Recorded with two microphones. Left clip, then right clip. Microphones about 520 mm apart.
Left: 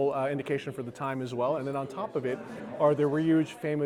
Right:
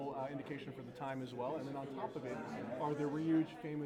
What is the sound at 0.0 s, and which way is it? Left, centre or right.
Speech, left.